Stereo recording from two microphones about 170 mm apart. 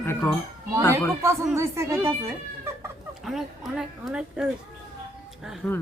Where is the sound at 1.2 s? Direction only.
15° right (ahead or behind).